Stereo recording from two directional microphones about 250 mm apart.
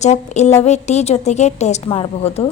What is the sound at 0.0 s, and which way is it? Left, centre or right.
Speech, left.